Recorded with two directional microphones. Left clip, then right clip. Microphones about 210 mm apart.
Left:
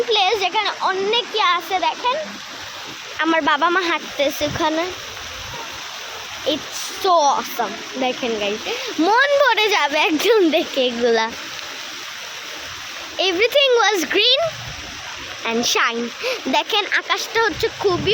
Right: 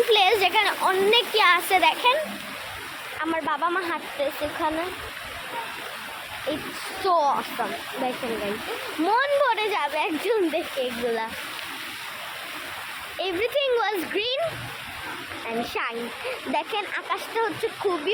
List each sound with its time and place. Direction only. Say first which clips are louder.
0.1 s speech: left 3 dB; 10° left (ahead or behind)
3.2 s speech: left 9 dB; 55° left (ahead or behind)
7.0 s speech: left 6 dB; 40° left (ahead or behind)
13.1 s speech: left 9 dB; 45° left (ahead or behind)
15.4 s speech: left 10 dB; 40° left (ahead or behind)